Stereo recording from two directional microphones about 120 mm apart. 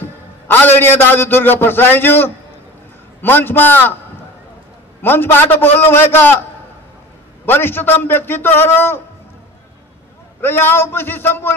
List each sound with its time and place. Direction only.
0.0 s a man's voice: 15° left (ahead or behind)
5.0 s a man's voice: 15° left (ahead or behind)
7.4 s a man's voice: 15° left (ahead or behind)
10.4 s a man's voice: 20° left (ahead or behind)